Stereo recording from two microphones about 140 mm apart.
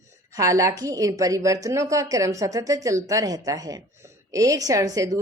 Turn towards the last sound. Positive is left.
turn(degrees=-25)  # may be behind; listen again after turning